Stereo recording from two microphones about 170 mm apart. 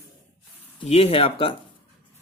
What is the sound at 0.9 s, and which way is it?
Speech, 35° left (ahead or behind).